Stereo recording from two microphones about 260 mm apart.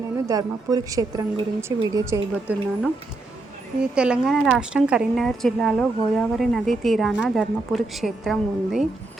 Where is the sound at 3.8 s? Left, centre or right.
Centre.